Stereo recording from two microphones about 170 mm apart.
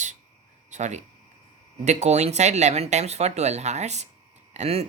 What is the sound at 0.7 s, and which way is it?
Speech, 45° right (ahead or behind).